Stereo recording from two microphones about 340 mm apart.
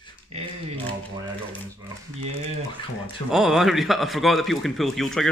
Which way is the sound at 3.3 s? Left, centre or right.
Centre.